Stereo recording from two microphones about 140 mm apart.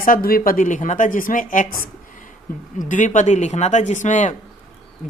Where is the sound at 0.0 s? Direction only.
85° left.